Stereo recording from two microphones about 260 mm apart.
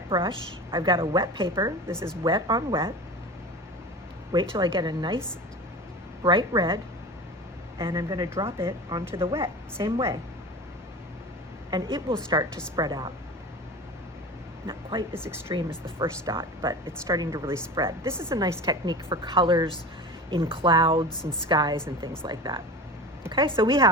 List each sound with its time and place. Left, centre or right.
0.1 s a woman's voice: centre
4.3 s speech: centre
6.2 s speech: centre
7.8 s speech: centre
11.7 s speech: centre
14.7 s a woman's voice: centre